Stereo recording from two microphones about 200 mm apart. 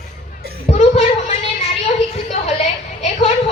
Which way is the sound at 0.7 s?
30° left (ahead or behind).